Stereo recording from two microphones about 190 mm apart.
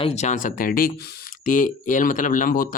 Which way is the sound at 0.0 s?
35° left (ahead or behind).